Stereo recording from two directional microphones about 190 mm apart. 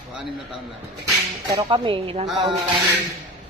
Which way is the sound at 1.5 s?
25° right (ahead or behind).